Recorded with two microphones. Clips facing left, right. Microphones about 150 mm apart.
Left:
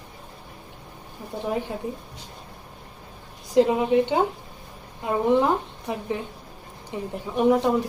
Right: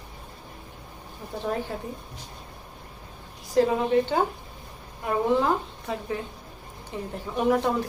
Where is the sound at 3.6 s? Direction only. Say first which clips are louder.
Left 2 dB; 20° left (ahead or behind).